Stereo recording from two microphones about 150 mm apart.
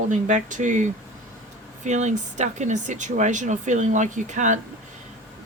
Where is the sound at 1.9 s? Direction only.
50° right (ahead or behind).